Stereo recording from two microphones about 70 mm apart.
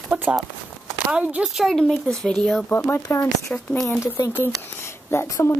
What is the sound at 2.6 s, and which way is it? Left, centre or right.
Speech, left.